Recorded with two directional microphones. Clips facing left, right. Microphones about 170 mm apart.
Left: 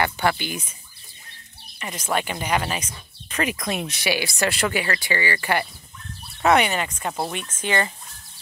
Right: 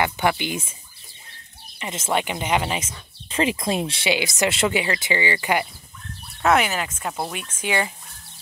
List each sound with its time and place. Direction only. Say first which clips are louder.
0.0 s speech: right 1 dB; 15° right (ahead or behind)
1.8 s speech: right 1 dB; 25° right (ahead or behind)
6.4 s speech: left 1 dB; centre (ahead or behind)
7.5 s speech: even; 10° right (ahead or behind)